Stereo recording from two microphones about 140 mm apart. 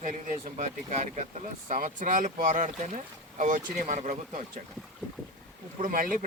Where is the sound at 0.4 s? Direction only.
55° right (ahead or behind).